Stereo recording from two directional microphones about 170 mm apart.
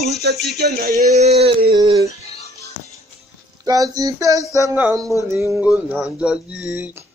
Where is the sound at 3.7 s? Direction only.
20° right (ahead or behind).